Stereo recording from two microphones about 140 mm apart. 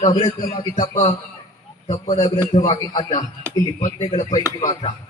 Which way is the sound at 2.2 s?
35° left (ahead or behind).